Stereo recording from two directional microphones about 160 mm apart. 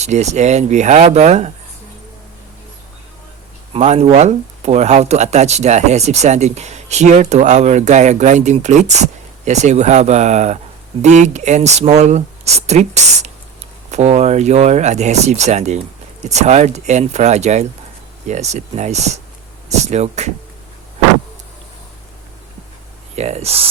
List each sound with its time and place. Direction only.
0.0 s speech: 45° right (ahead or behind)
3.7 s speech: 45° right (ahead or behind)
23.1 s speech: 40° right (ahead or behind)